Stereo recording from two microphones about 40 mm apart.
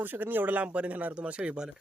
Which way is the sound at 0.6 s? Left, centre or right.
Right.